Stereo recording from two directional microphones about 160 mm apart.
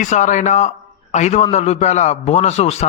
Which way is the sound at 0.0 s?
50° left (ahead or behind).